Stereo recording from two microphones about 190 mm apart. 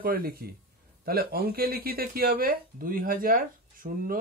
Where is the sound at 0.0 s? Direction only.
50° right (ahead or behind).